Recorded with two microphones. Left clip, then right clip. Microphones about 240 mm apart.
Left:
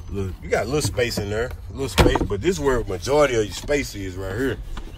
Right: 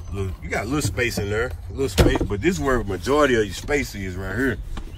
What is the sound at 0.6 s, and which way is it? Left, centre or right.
Speech, centre.